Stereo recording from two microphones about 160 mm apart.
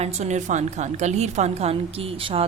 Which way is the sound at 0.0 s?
40° right (ahead or behind).